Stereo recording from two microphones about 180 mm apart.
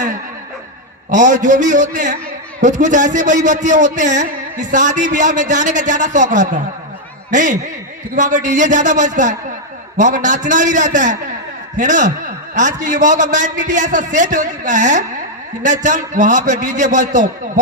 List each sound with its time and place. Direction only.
1.1 s a man's voice: 45° right (ahead or behind)